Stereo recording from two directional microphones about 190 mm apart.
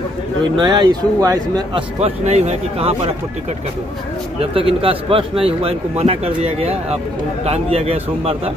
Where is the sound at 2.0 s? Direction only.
35° right (ahead or behind).